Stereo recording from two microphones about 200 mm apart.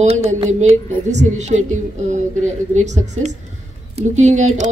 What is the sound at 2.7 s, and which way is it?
Speech, 35° right (ahead or behind).